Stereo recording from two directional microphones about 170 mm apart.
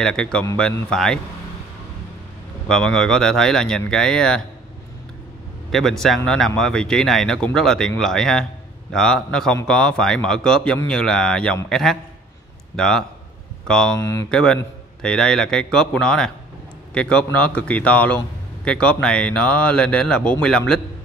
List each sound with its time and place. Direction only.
0.0 s speech: 5° left (ahead or behind)
2.7 s speech: 5° left (ahead or behind)
5.7 s speech: centre (ahead or behind)
13.9 s a man's voice: 15° left (ahead or behind)
14.3 s a man's voice: 5° left (ahead or behind)